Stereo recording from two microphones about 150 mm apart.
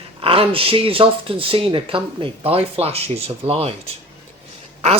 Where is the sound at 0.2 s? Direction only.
40° right (ahead or behind).